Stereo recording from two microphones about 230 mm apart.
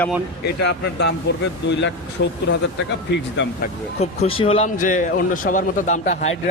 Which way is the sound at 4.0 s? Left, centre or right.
Left.